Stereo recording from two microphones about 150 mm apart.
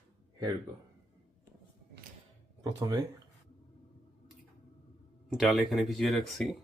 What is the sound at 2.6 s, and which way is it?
Speech, 25° right (ahead or behind).